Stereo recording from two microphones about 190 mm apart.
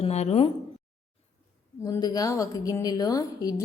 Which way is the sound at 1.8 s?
20° left (ahead or behind).